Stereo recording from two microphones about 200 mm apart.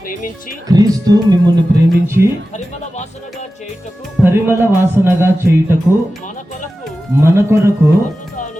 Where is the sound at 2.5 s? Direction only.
35° left (ahead or behind).